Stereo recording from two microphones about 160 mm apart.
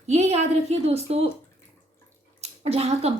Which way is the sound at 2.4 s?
40° right (ahead or behind).